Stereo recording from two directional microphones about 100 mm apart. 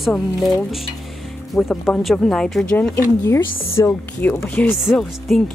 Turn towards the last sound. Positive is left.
turn(degrees=0)  # may be behind; listen again after turning